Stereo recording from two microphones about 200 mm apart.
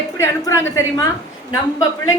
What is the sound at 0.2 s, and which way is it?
A woman's voice, 15° left (ahead or behind).